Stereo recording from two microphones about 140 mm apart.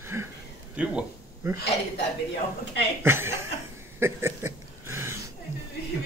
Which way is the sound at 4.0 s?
15° right (ahead or behind).